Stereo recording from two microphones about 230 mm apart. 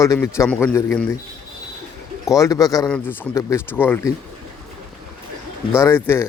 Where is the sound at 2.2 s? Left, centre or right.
Centre.